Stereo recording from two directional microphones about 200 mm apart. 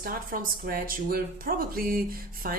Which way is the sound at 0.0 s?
45° right (ahead or behind).